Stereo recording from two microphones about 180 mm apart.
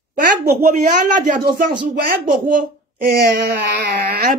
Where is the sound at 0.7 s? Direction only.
45° right (ahead or behind); by 3.6 s 60° right (ahead or behind).